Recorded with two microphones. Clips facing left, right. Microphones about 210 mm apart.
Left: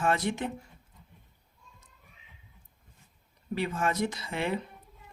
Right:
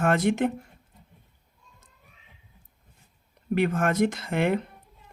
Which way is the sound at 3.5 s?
55° right (ahead or behind).